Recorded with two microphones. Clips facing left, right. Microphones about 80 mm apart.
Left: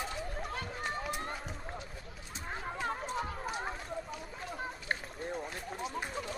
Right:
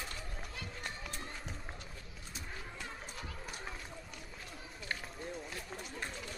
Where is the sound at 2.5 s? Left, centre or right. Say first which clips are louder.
Left 11 dB; left.